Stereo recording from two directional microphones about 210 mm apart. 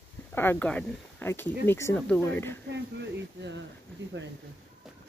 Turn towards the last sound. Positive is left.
turn(degrees=-55)  # may be behind; listen again after turning